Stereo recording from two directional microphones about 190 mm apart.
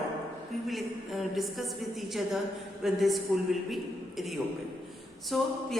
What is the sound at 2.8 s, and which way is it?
A man's voice, centre (ahead or behind).